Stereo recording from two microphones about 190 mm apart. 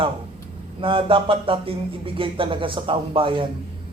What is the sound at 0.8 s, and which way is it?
Speech, 25° right (ahead or behind).